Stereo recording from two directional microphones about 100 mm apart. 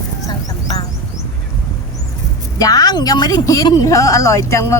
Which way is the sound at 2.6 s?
40° left (ahead or behind).